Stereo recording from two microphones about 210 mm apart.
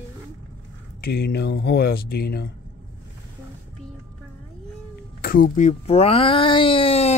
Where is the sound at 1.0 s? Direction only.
50° left (ahead or behind).